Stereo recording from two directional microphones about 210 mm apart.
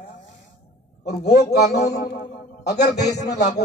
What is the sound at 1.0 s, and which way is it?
A man's voice, 50° left (ahead or behind).